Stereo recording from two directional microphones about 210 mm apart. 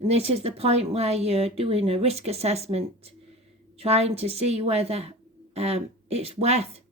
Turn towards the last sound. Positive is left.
turn(degrees=-30)  # may be behind; listen again after turning